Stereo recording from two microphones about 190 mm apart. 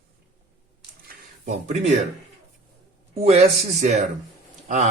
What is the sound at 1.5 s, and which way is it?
Speech, 35° right (ahead or behind).